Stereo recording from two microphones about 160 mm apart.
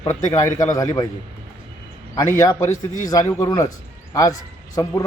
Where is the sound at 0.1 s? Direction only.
20° left (ahead or behind).